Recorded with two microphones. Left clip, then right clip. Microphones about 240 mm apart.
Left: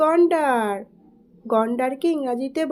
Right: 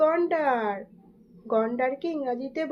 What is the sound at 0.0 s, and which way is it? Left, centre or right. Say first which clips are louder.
A woman's voice: left 5 dB; left.